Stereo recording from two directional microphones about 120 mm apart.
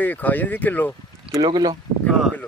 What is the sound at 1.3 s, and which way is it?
Speech, 35° right (ahead or behind).